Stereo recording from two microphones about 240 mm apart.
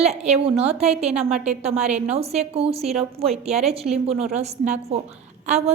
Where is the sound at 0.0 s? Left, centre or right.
Right.